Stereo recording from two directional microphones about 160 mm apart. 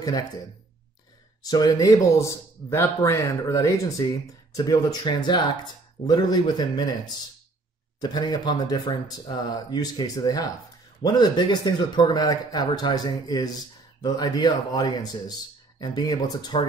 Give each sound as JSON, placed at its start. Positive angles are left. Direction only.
{"t": 0.0, "sound": "speech", "side_deg": 25}
{"t": 1.4, "sound": "speech", "side_deg": 25}
{"t": 8.0, "sound": "speech", "side_deg": 25}